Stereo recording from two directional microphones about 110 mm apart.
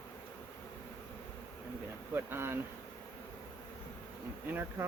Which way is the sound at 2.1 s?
20° right (ahead or behind).